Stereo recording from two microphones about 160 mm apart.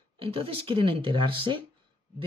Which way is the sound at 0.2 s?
35° right (ahead or behind).